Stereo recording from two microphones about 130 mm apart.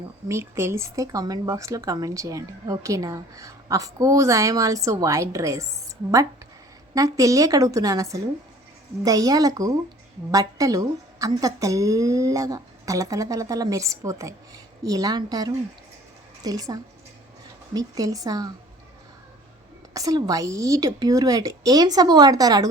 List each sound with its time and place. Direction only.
0.3 s speech: 20° right (ahead or behind)
6.9 s speech: 25° right (ahead or behind)
19.9 s speech: 25° right (ahead or behind)